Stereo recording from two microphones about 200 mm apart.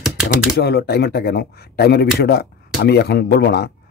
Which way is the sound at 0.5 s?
55° left (ahead or behind).